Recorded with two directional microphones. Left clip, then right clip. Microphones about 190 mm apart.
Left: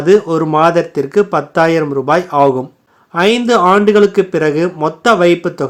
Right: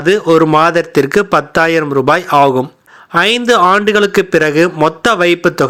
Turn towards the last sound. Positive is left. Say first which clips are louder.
# right 1 dB
turn(degrees=-15)  # may be behind; listen again after turning